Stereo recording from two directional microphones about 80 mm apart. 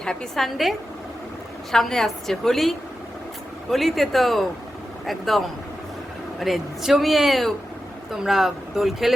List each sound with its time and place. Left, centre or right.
0.0 s speech: centre